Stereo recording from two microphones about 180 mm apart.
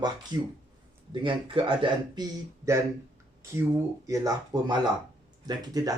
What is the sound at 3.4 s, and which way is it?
Speech, 15° right (ahead or behind).